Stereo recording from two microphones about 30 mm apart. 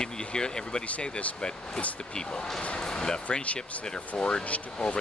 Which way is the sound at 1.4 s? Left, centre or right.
Left.